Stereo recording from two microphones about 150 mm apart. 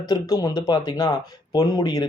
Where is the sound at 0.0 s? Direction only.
25° left (ahead or behind).